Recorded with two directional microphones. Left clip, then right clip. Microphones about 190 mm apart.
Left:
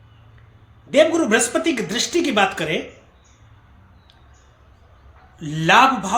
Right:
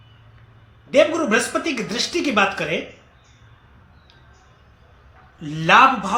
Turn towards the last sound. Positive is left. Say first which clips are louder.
# right 1 dB
turn(degrees=20)  # may be behind; listen again after turning